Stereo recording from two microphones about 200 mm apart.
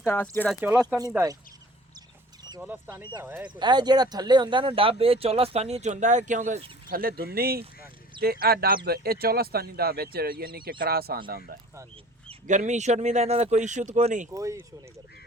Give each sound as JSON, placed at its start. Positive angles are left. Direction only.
{"t": 0.0, "sound": "speech", "side_deg": 10}
{"t": 0.5, "sound": "speech", "side_deg": -10}
{"t": 2.6, "sound": "speech", "side_deg": -10}
{"t": 12.3, "sound": "speech", "side_deg": -35}
{"t": 14.3, "sound": "speech", "side_deg": -15}